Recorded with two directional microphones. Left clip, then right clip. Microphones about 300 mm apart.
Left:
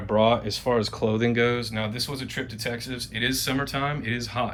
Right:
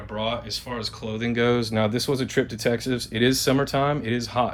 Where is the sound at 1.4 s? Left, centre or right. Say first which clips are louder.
Right 3 dB; centre.